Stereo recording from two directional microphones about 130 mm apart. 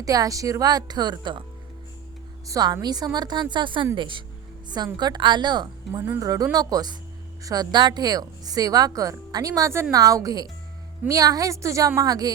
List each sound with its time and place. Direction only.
0.0 s speech: 25° right (ahead or behind)
2.5 s a woman's voice: 30° right (ahead or behind)